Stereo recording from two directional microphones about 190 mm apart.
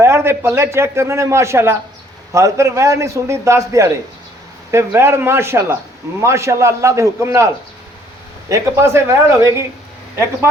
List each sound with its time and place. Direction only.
0.0 s a man's voice: 15° right (ahead or behind)